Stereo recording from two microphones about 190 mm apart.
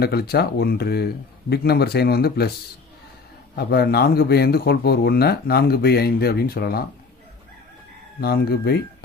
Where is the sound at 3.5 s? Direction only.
55° left (ahead or behind).